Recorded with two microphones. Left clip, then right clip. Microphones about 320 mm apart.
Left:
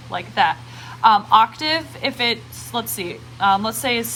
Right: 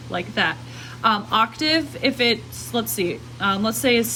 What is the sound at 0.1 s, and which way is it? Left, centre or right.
A woman's voice, centre.